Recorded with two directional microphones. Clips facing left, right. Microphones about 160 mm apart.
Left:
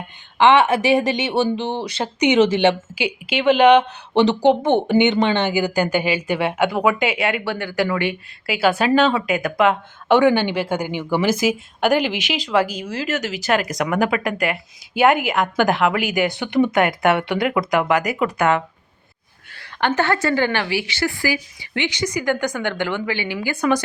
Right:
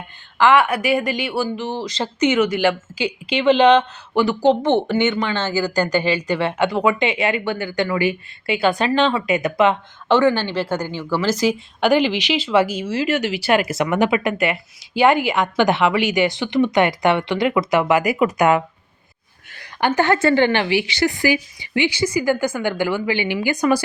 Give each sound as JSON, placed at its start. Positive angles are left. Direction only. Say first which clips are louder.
{"t": 0.3, "sound": "speech", "louder": "left 1 dB", "side_deg": 20}
{"t": 2.9, "sound": "speech", "louder": "right 1 dB", "side_deg": 10}
{"t": 4.1, "sound": "a woman's voice", "louder": "left 1 dB", "side_deg": 20}
{"t": 10.1, "sound": "a woman's voice", "louder": "left 1 dB", "side_deg": 15}
{"t": 19.8, "sound": "speech", "louder": "right 1 dB", "side_deg": -10}
{"t": 20.2, "sound": "speech", "louder": "right 4 dB", "side_deg": -25}
{"t": 23.3, "sound": "a woman's voice", "louder": "right 4 dB", "side_deg": -25}
{"t": 23.6, "sound": "speech", "louder": "even", "side_deg": -10}